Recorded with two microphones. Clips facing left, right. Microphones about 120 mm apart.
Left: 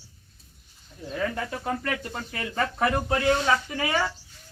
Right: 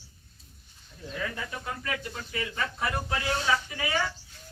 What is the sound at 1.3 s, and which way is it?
Speech, 50° left (ahead or behind).